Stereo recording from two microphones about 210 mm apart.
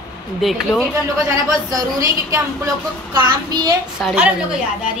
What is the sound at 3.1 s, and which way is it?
Child singing, 20° right (ahead or behind).